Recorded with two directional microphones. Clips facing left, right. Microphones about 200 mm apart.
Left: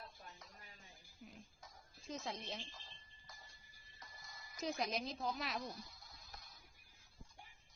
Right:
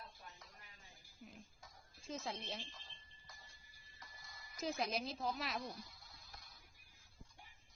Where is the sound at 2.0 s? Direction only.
Centre (ahead or behind).